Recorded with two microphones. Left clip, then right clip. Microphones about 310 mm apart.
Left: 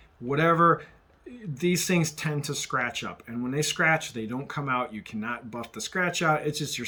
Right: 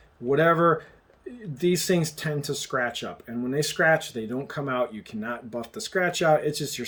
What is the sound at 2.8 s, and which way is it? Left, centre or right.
Speech, right.